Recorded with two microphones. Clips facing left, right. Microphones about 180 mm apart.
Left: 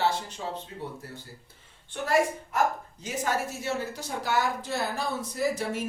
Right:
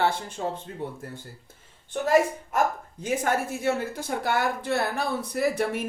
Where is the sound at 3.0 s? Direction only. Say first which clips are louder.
Right 4 dB; 55° right (ahead or behind).